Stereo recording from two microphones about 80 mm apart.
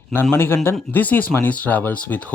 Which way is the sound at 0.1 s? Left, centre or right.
Left.